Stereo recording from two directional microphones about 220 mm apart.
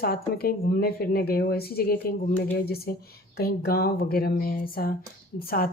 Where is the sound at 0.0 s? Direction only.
45° left (ahead or behind).